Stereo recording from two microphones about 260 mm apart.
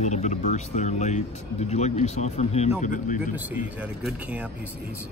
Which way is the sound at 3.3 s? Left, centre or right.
Centre.